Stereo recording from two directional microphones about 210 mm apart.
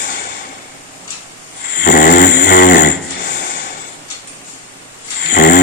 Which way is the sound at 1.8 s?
40° left (ahead or behind).